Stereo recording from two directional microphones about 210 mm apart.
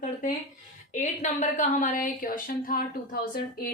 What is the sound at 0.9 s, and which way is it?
A woman's voice, 35° left (ahead or behind).